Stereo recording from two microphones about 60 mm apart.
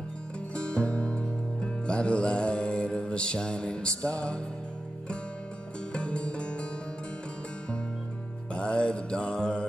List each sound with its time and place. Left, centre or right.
0.6 s music: centre
5.9 s music: centre
8.5 s mantra: centre